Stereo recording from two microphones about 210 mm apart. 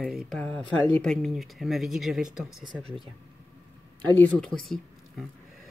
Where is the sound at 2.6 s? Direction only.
20° right (ahead or behind).